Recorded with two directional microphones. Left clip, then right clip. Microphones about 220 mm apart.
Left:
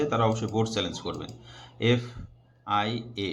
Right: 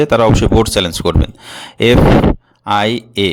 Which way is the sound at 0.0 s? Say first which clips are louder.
Right 15 dB; 55° right (ahead or behind).